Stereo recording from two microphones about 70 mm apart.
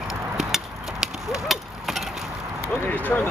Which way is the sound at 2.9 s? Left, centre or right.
Left.